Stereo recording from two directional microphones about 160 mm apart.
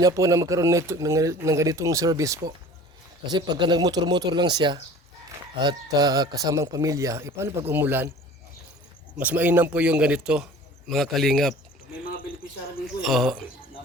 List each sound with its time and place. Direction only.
0.0 s a man's voice: 20° right (ahead or behind)
9.1 s a man's voice: 10° right (ahead or behind)
13.0 s a man's voice: centre (ahead or behind)